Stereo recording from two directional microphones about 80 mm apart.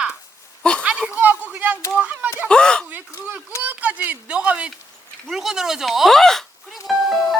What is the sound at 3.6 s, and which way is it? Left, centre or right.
Speech, right.